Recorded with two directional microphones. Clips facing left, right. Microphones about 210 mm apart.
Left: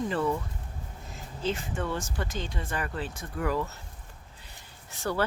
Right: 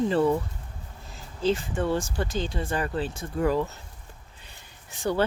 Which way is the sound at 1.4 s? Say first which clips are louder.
Right 6 dB; 35° right (ahead or behind).